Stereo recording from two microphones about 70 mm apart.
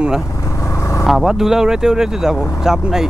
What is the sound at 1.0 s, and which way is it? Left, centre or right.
Speech, centre.